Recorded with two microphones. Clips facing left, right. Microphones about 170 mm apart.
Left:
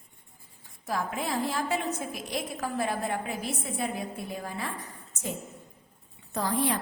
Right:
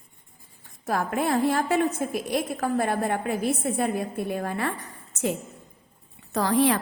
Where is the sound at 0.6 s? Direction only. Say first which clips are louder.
Right 5 dB; 60° right (ahead or behind).